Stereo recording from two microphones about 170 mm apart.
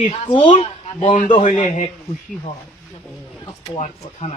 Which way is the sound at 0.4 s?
50° left (ahead or behind).